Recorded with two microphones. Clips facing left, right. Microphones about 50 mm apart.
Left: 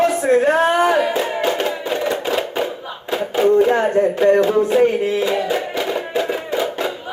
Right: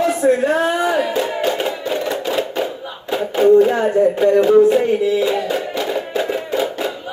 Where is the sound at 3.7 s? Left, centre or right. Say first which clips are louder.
Even; left.